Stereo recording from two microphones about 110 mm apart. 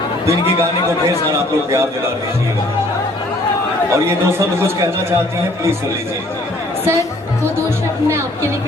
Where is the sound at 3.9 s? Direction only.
25° right (ahead or behind).